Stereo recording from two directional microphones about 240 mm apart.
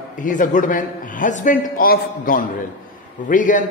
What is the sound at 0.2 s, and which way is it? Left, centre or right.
A man's voice, left.